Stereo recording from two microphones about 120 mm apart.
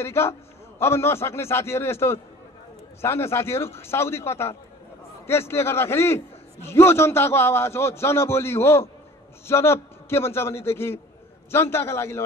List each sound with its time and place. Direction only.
0.0 s a man's voice: 20° left (ahead or behind)